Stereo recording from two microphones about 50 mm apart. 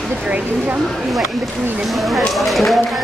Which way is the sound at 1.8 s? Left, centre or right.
Centre.